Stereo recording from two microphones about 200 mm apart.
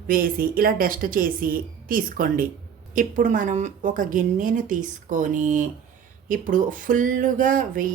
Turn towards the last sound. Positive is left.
turn(degrees=-45)  # may be behind; listen again after turning